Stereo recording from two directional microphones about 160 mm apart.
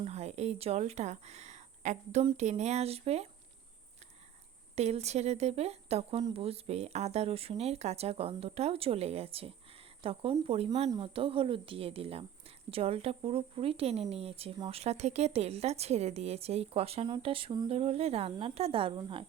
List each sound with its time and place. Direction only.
0.0 s speech: 40° right (ahead or behind)
4.7 s speech: 40° right (ahead or behind)